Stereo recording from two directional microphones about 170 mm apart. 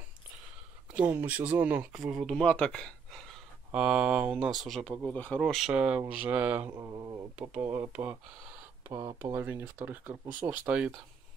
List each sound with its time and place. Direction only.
0.9 s speech: 10° right (ahead or behind)
6.7 s speech: 20° right (ahead or behind)
7.3 s speech: 10° right (ahead or behind)